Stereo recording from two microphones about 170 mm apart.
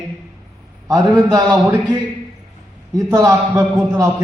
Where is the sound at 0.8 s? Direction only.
20° right (ahead or behind).